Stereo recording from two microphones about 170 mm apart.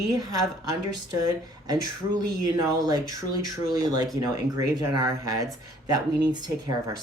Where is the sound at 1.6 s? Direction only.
25° right (ahead or behind).